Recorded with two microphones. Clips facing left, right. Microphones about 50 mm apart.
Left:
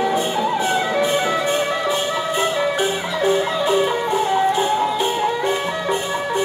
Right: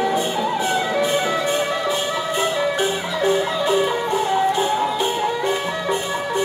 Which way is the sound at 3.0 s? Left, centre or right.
Left.